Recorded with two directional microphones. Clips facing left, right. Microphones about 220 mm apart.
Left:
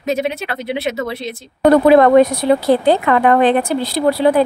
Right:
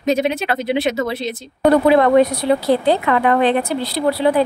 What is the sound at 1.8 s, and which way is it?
Speech, 50° left (ahead or behind).